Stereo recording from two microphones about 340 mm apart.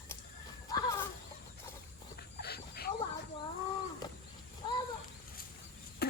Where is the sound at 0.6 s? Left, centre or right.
Centre.